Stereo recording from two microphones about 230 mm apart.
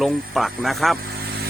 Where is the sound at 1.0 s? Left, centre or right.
Right.